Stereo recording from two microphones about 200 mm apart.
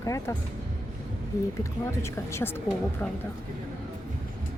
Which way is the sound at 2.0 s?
15° left (ahead or behind).